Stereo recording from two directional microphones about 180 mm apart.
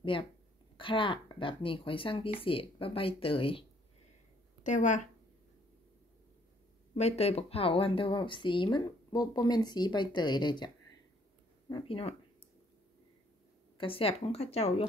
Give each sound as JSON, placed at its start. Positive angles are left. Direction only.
{"t": 0.7, "sound": "speech", "side_deg": 30}
{"t": 4.6, "sound": "speech", "side_deg": 45}
{"t": 7.0, "sound": "speech", "side_deg": 35}
{"t": 11.7, "sound": "speech", "side_deg": 30}
{"t": 13.7, "sound": "speech", "side_deg": 30}